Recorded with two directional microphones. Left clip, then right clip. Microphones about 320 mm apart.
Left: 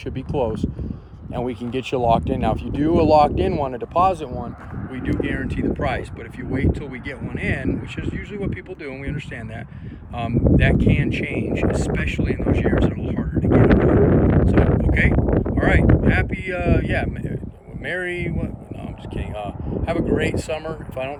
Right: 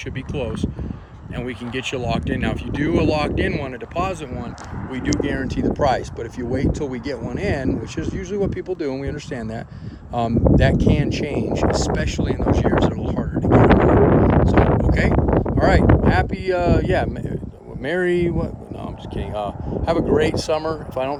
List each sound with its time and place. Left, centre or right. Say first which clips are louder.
0.3 s speech: left 4 dB; centre
4.9 s speech: right 2 dB; centre
11.8 s a sound: right 2 dB; centre
17.9 s speech: right 6 dB; right